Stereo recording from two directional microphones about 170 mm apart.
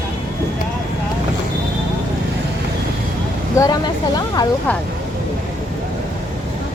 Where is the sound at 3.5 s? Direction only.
20° left (ahead or behind).